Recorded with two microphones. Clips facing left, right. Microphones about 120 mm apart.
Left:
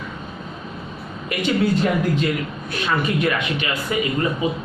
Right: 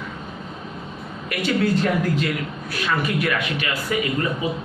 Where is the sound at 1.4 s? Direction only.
20° left (ahead or behind).